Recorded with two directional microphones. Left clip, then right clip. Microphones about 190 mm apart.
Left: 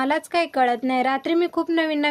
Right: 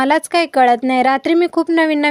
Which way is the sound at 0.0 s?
45° right (ahead or behind).